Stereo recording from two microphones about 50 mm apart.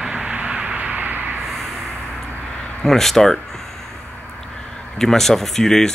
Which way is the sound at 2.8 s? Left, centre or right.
Centre.